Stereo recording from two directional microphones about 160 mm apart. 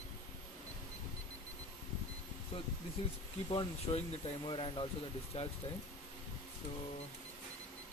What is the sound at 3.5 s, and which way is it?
Speech, 35° left (ahead or behind).